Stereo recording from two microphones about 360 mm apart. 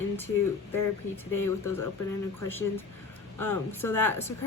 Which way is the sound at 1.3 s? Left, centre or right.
Centre.